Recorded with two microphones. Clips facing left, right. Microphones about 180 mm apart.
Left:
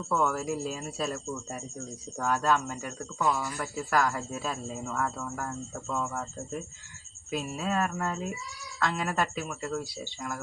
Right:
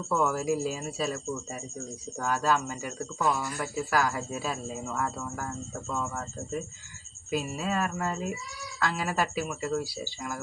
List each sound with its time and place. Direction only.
0.1 s speech: 5° right (ahead or behind)
7.3 s speech: centre (ahead or behind)